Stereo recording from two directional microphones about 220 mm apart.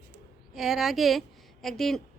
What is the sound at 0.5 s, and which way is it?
Speech, centre (ahead or behind).